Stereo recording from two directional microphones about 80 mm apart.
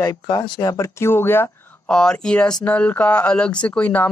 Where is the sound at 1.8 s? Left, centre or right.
Centre.